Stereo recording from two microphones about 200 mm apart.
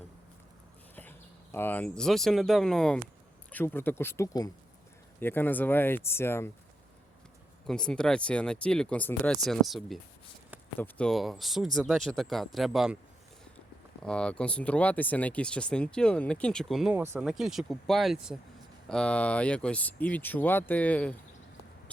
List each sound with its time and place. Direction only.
1.5 s speech: 10° left (ahead or behind)
7.7 s speech: 5° left (ahead or behind)
14.0 s speech: 5° left (ahead or behind)